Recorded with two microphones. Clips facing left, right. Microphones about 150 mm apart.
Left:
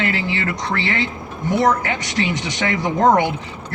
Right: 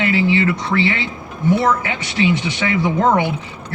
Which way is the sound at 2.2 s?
45° left (ahead or behind).